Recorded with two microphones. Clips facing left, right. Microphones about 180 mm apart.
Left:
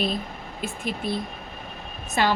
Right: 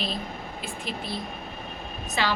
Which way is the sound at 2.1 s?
50° left (ahead or behind).